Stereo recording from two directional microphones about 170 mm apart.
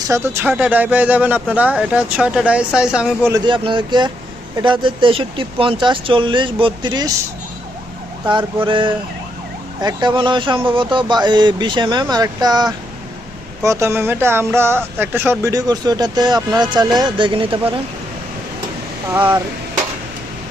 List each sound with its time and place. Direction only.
0.1 s speech: 10° right (ahead or behind)
3.3 s speech: 30° right (ahead or behind)
8.6 s speech: 30° right (ahead or behind)